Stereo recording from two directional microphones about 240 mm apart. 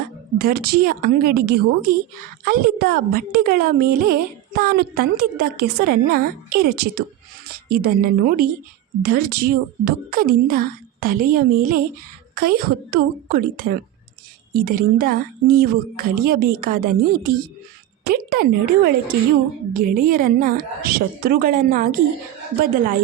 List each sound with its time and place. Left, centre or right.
0.3 s a woman's voice: right
19.7 s a woman's voice: right